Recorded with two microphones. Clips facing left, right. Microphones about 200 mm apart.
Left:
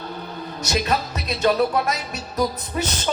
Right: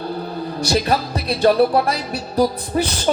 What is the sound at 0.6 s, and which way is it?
Music, 30° right (ahead or behind).